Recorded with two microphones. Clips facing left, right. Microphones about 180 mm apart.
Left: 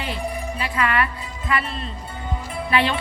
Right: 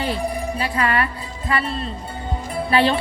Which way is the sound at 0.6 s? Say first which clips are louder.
Right 1 dB; 35° right (ahead or behind).